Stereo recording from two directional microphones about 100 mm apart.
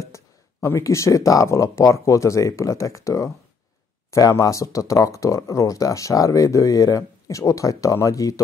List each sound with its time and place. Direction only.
0.0 s speech: 30° left (ahead or behind)